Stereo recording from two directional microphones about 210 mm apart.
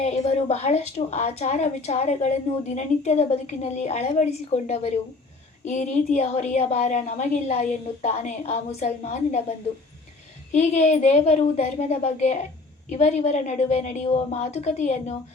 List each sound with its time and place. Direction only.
0.0 s a woman's voice: 30° left (ahead or behind)
10.5 s a woman's voice: 35° left (ahead or behind)